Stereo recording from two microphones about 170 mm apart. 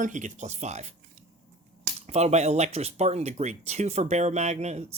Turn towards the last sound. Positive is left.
turn(degrees=-40)  # may be behind; listen again after turning